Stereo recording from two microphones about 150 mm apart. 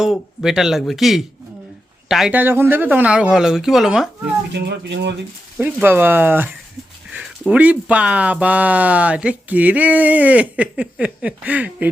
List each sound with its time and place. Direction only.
0.0 s speech: 5° right (ahead or behind)
4.6 s speech: 90° right
5.5 s speech: 15° right (ahead or behind)